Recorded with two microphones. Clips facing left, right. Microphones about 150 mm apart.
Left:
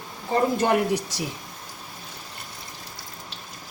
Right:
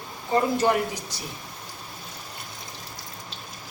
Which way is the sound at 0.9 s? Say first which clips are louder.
Left 10 dB; 90° left.